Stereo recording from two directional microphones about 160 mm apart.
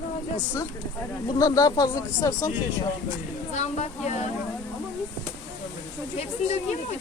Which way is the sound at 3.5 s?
45° left (ahead or behind).